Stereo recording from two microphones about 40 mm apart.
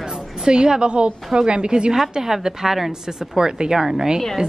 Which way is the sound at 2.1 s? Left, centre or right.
Centre.